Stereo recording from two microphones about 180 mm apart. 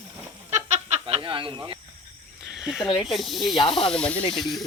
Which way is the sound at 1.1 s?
30° right (ahead or behind).